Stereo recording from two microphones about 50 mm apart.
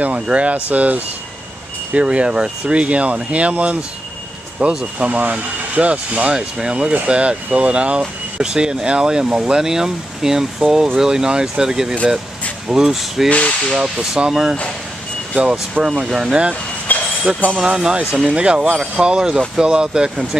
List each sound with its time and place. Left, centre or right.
0.0 s speech: right; by 13.3 s centre
13.3 s speech: left
13.7 s speech: centre
16.9 s a sound: left
17.6 s speech: centre